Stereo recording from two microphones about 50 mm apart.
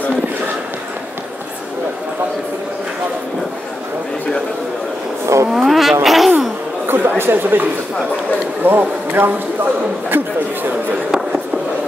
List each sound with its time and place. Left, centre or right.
5.2 s vehicle: right
5.5 s vehicle: centre
6.0 s a sound: centre
6.9 s chatter: right
8.6 s speech: right